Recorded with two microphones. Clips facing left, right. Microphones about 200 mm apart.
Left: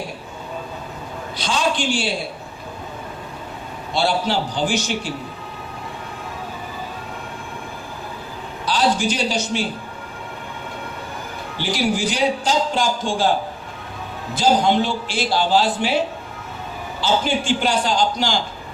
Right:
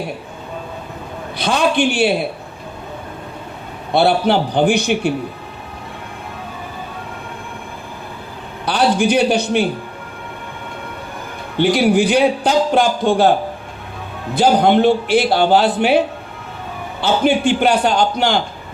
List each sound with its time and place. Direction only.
1.4 s a man's voice: 60° right (ahead or behind)
3.9 s a man's voice: 60° right (ahead or behind)
8.6 s a man's voice: 60° right (ahead or behind)
11.5 s a man's voice: 60° right (ahead or behind)
14.3 s a man's voice: 60° right (ahead or behind)